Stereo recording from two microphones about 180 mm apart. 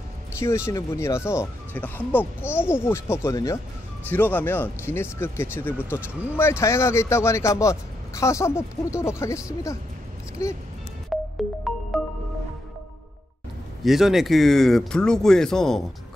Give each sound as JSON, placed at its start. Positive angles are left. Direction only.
{"t": 0.4, "sound": "speech", "side_deg": 15}
{"t": 11.1, "sound": "music", "side_deg": 0}
{"t": 13.8, "sound": "speech", "side_deg": 0}